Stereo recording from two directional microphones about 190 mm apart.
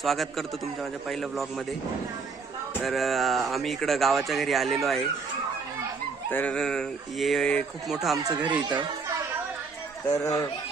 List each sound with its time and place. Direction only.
0.0 s speech: centre (ahead or behind)
2.8 s speech: centre (ahead or behind)
6.3 s speech: 5° left (ahead or behind)
8.5 s speech: 25° right (ahead or behind)
10.1 s speech: 15° left (ahead or behind)